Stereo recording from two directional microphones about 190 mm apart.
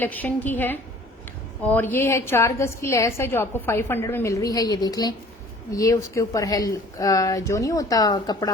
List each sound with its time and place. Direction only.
0.0 s a woman's voice: 10° left (ahead or behind)